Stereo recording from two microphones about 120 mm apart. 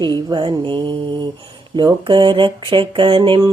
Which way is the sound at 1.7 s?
40° right (ahead or behind).